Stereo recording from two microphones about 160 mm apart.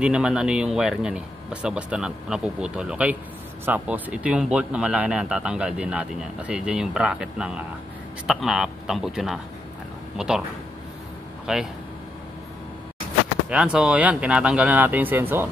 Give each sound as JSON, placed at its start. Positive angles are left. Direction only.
{"t": 0.0, "sound": "speech", "side_deg": -5}
{"t": 11.5, "sound": "speech", "side_deg": -5}
{"t": 13.5, "sound": "speech", "side_deg": -5}